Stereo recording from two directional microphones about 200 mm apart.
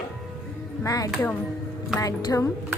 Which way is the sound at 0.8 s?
15° left (ahead or behind).